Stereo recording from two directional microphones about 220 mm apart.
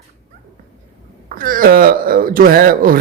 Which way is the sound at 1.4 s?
40° right (ahead or behind).